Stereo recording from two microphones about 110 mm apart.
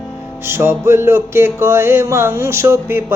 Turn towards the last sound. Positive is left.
turn(degrees=-20)  # may be behind; listen again after turning